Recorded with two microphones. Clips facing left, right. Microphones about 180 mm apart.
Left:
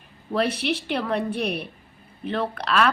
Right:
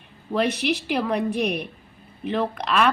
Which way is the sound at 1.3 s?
30° left (ahead or behind).